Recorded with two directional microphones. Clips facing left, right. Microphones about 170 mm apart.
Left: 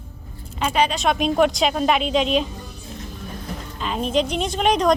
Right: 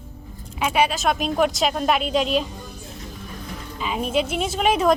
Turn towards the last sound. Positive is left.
turn(degrees=-5)  # may be behind; listen again after turning